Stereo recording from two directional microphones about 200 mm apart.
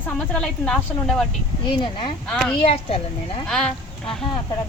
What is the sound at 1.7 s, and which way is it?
Speech, 25° left (ahead or behind).